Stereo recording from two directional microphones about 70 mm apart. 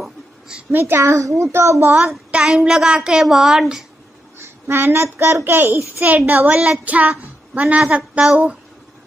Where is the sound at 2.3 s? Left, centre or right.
Centre.